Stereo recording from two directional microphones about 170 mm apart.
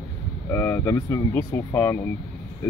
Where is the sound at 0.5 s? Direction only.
15° left (ahead or behind).